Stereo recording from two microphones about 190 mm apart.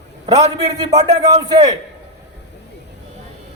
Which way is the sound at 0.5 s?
20° right (ahead or behind).